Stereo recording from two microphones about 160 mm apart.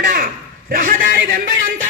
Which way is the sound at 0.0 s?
60° right (ahead or behind).